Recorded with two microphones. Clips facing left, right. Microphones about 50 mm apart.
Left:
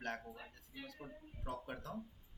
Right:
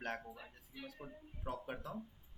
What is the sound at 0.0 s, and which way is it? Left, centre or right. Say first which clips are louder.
A man's voice: right 1 dB; centre.